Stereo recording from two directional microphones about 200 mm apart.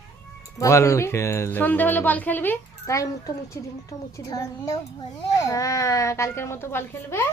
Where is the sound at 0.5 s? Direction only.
15° left (ahead or behind).